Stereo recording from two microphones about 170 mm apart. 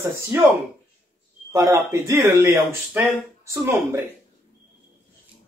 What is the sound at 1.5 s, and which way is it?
A man's voice, 20° right (ahead or behind).